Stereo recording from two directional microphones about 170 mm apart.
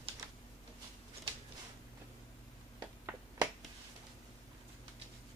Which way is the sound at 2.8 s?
15° right (ahead or behind).